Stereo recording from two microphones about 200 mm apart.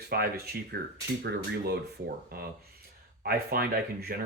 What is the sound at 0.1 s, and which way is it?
Speech, 50° right (ahead or behind).